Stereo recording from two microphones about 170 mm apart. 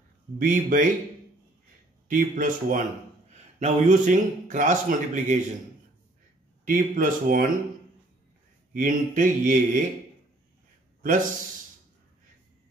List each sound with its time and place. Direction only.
0.4 s a man's voice: 55° right (ahead or behind)
2.0 s a man's voice: 55° right (ahead or behind)
6.6 s speech: 55° right (ahead or behind)
8.7 s a man's voice: 50° right (ahead or behind)